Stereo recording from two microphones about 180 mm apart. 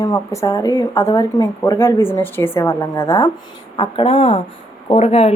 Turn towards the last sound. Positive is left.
turn(degrees=35)  # may be behind; listen again after turning